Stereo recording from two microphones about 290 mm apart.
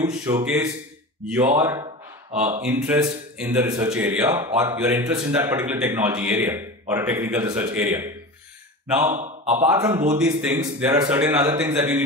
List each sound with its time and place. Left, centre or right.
0.1 s a man's voice: centre
9.1 s speech: right
9.7 s a man's voice: centre